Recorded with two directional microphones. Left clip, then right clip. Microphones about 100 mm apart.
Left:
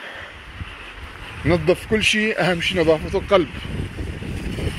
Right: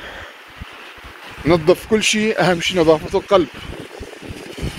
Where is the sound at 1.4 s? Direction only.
85° right; by 3.2 s 60° right (ahead or behind).